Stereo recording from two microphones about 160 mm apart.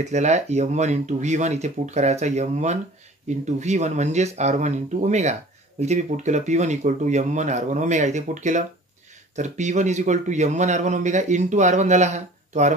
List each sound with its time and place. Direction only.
0.0 s a man's voice: 45° right (ahead or behind)